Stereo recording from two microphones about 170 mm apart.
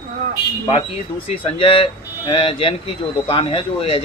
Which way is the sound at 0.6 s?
35° left (ahead or behind).